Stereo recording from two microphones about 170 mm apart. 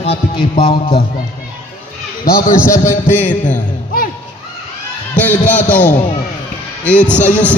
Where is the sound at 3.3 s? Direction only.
50° left (ahead or behind).